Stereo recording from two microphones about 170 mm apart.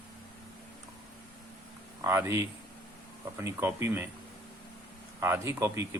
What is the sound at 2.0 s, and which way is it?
Speech, 15° right (ahead or behind).